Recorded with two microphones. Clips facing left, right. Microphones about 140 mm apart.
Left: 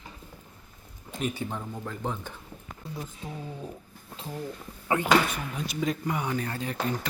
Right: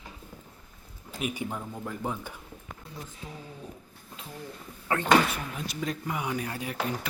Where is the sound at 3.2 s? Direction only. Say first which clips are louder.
Left 3 dB; 40° left (ahead or behind).